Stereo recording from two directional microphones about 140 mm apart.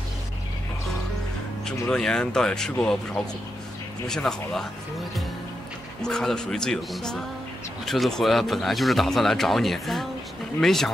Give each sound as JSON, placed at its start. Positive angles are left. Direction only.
{"t": 1.7, "sound": "speech", "side_deg": 5}
{"t": 6.0, "sound": "speech", "side_deg": 5}